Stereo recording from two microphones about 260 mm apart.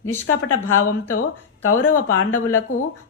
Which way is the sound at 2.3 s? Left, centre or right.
Centre.